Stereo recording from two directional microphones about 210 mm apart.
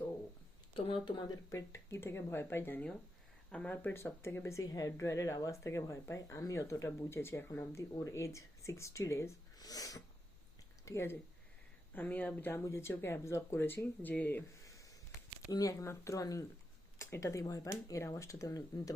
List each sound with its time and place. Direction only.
1.0 s speech: 15° left (ahead or behind)